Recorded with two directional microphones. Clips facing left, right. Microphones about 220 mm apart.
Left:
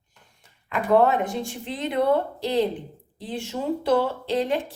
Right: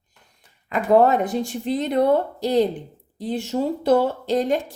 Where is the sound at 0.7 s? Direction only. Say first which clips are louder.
Right 3 dB; 40° right (ahead or behind).